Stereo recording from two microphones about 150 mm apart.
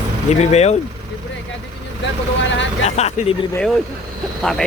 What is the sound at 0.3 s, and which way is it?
Speech, 45° left (ahead or behind).